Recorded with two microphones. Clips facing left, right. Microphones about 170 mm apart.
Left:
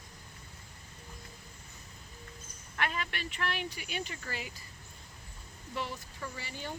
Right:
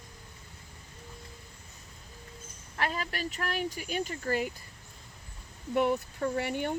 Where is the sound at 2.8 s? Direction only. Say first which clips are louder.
Right 3 dB; 35° right (ahead or behind).